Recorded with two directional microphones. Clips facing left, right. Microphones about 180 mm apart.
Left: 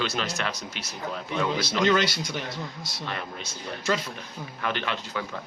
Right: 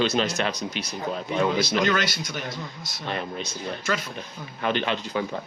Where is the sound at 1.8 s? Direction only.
25° left (ahead or behind).